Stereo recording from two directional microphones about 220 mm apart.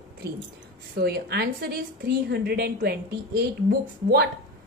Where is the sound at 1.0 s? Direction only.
45° right (ahead or behind).